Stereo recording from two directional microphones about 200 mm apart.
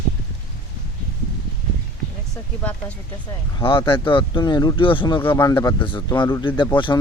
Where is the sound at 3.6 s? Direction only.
25° left (ahead or behind).